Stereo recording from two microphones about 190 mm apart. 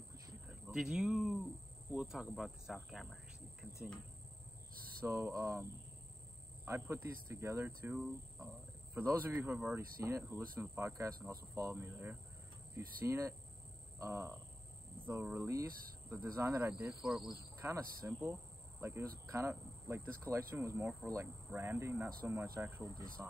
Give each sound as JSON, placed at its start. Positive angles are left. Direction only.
{"t": 0.7, "sound": "speech", "side_deg": -5}
{"t": 5.0, "sound": "speech", "side_deg": -15}
{"t": 15.3, "sound": "speech", "side_deg": -15}
{"t": 17.0, "sound": "speech", "side_deg": 0}
{"t": 17.6, "sound": "speech", "side_deg": -15}